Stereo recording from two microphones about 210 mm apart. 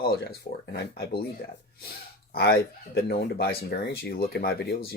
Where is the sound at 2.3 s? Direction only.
50° left (ahead or behind).